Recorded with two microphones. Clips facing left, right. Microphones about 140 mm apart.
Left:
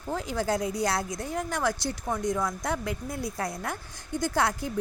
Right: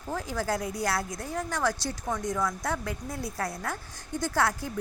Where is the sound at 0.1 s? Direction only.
20° left (ahead or behind).